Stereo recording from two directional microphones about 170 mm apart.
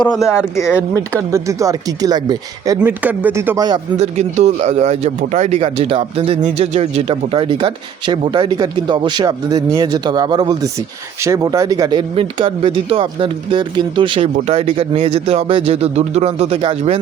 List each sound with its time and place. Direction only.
0.3 s speech: 15° left (ahead or behind)
1.3 s speech: 20° right (ahead or behind)
2.8 s speech: 10° right (ahead or behind)
3.9 s speech: 40° right (ahead or behind)
14.3 s speech: 40° right (ahead or behind)